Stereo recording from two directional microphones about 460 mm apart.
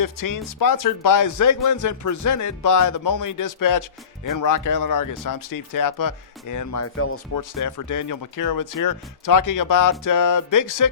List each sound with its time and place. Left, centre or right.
0.0 s speech: left
7.3 s speech: left